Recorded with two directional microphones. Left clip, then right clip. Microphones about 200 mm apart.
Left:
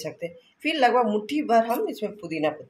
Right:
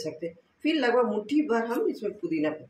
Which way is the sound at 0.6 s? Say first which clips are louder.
Left 4 dB; 55° left (ahead or behind).